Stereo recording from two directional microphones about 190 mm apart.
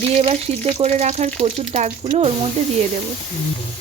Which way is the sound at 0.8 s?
35° right (ahead or behind).